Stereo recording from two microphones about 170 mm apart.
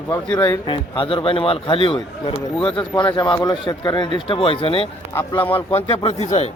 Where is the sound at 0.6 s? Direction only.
30° left (ahead or behind).